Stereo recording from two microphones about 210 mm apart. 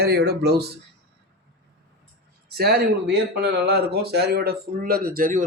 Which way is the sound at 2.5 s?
50° right (ahead or behind).